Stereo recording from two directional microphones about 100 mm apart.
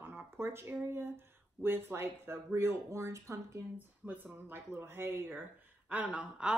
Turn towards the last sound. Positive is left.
turn(degrees=-10)  # may be behind; listen again after turning